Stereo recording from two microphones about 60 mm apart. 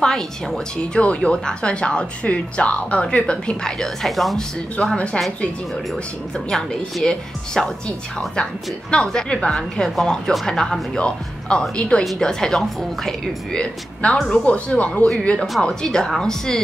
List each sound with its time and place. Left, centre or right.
0.0 s speech: centre
4.9 s speech: centre
5.9 s speech: centre
14.4 s speech: left